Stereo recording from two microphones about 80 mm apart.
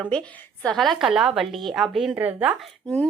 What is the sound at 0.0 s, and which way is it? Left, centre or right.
Speech, centre.